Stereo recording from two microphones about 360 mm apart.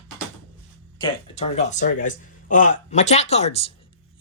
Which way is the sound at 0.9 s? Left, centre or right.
Centre.